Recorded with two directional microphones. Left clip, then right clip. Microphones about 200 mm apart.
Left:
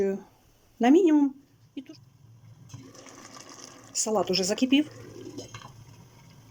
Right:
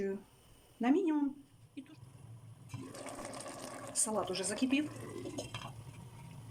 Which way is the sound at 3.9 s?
35° left (ahead or behind).